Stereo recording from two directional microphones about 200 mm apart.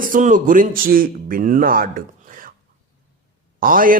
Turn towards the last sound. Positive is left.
turn(degrees=-45)  # may be behind; listen again after turning